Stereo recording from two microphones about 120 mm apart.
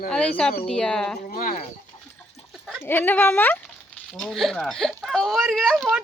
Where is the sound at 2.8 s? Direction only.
15° left (ahead or behind).